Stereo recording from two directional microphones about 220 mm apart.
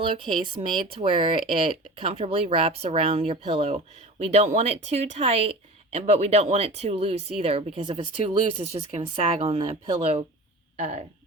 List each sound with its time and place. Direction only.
0.0 s speech: 20° right (ahead or behind)